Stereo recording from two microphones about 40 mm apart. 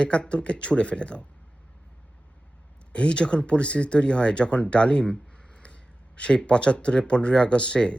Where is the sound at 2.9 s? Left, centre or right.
Left.